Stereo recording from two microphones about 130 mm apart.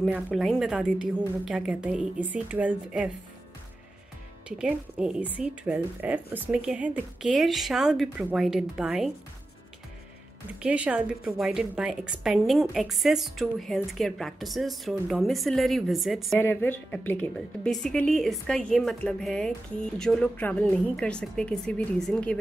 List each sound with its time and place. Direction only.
0.3 s a woman's voice: centre (ahead or behind)
4.5 s a woman's voice: 5° right (ahead or behind)
10.6 s a woman's voice: 10° right (ahead or behind)
16.3 s a woman's voice: 15° left (ahead or behind)